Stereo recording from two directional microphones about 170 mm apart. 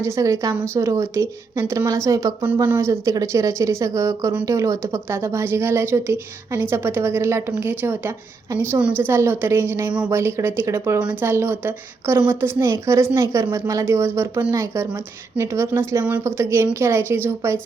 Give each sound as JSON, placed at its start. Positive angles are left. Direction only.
{"t": 0.0, "sound": "a woman's voice", "side_deg": -20}